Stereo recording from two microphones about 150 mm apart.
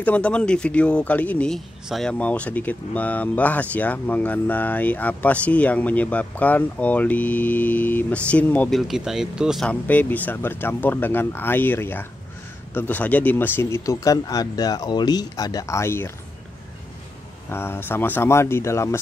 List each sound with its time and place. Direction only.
0.0 s speech: 10° left (ahead or behind)
9.7 s speech: 10° left (ahead or behind)
17.5 s speech: 15° left (ahead or behind)